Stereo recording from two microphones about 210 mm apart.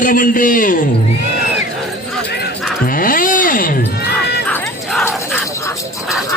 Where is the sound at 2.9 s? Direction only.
40° left (ahead or behind).